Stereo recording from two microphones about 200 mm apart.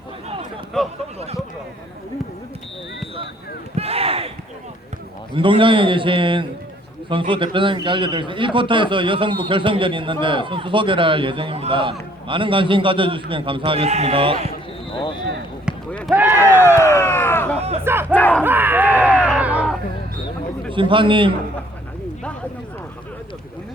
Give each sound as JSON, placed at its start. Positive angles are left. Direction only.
{"t": 0.8, "sound": "speech", "side_deg": 0}
{"t": 3.8, "sound": "a sound", "side_deg": -30}
{"t": 5.3, "sound": "a man's voice", "side_deg": -25}
{"t": 15.9, "sound": "basketball bounce", "side_deg": 5}
{"t": 16.1, "sound": "a sound", "side_deg": -10}
{"t": 16.4, "sound": "speech", "side_deg": 10}
{"t": 17.6, "sound": "speech", "side_deg": -30}
{"t": 18.1, "sound": "speech", "side_deg": 10}
{"t": 18.4, "sound": "a sound", "side_deg": -10}
{"t": 20.7, "sound": "a man's voice", "side_deg": -25}